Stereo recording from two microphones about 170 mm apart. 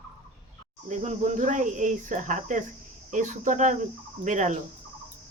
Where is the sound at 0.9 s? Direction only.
45° right (ahead or behind).